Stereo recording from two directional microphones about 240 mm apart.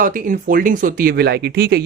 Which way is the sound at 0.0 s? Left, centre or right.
Right.